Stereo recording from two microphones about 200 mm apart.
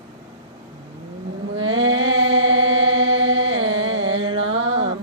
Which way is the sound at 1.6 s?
90° right.